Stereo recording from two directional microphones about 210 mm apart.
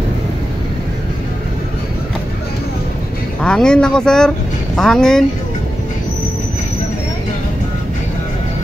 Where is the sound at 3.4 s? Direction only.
5° left (ahead or behind).